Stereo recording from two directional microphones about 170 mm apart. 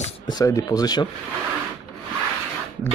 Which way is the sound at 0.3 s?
20° left (ahead or behind).